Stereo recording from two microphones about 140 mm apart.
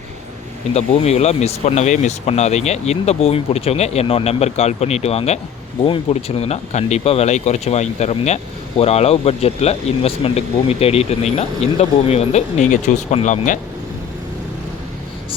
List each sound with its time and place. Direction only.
0.7 s speech: 50° left (ahead or behind); by 13.6 s 65° left (ahead or behind)